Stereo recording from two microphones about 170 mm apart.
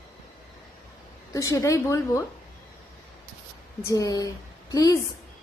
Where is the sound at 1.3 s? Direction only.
20° left (ahead or behind).